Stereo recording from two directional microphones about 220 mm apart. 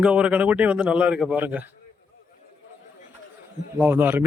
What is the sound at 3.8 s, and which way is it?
Speech, 10° right (ahead or behind).